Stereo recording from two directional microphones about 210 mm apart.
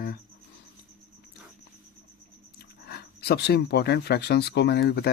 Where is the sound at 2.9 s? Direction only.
50° left (ahead or behind).